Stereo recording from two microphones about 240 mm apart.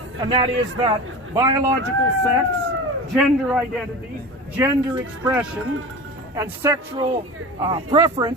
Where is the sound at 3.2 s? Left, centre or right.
Centre.